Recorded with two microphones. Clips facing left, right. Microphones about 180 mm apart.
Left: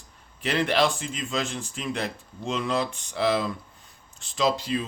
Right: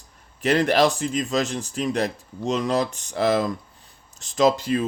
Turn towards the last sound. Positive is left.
turn(degrees=-50)  # may be behind; listen again after turning